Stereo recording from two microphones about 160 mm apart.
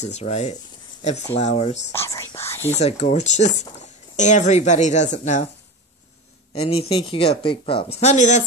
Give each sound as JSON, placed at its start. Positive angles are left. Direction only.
{"t": 0.0, "sound": "speech", "side_deg": 45}
{"t": 1.9, "sound": "speech", "side_deg": 20}
{"t": 2.7, "sound": "speech", "side_deg": 45}
{"t": 6.6, "sound": "speech", "side_deg": 40}